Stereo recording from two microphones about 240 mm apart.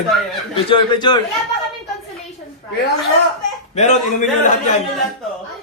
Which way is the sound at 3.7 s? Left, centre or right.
Left.